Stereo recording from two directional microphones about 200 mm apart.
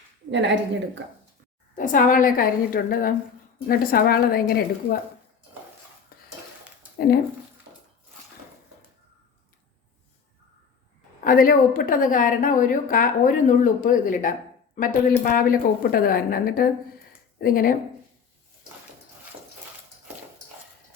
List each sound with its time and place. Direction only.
0.3 s a woman's voice: 60° right (ahead or behind)
1.7 s a woman's voice: 40° left (ahead or behind)
6.1 s cutlery: 45° left (ahead or behind)
11.2 s a woman's voice: 45° left (ahead or behind)